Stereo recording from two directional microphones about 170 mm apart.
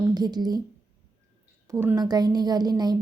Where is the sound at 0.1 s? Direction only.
25° right (ahead or behind).